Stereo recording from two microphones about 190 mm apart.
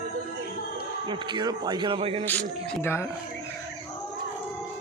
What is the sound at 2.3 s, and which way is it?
Speech, 10° left (ahead or behind).